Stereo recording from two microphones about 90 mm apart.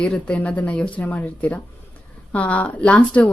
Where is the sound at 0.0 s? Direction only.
10° left (ahead or behind).